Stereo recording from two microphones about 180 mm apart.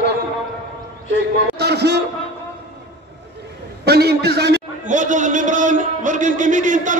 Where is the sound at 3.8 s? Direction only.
65° right (ahead or behind).